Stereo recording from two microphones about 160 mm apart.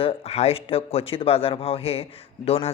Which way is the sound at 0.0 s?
35° left (ahead or behind).